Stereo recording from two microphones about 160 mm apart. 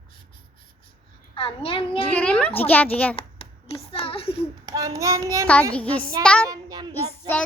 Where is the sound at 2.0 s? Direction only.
10° left (ahead or behind).